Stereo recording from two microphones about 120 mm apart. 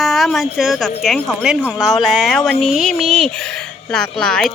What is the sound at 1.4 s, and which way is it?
A child's voice, 5° right (ahead or behind).